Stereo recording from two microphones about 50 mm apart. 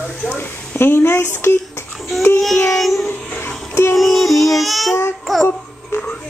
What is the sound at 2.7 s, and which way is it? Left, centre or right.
Child singing, centre.